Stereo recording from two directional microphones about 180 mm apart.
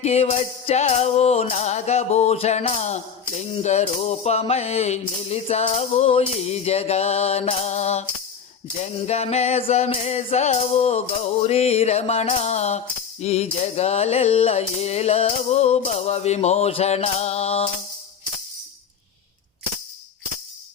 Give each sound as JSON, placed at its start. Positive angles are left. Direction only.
{"t": 0.0, "sound": "music", "side_deg": 35}